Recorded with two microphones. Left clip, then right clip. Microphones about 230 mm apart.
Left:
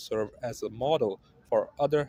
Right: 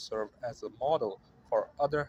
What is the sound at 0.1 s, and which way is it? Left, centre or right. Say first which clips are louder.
Speech: left 5 dB; left.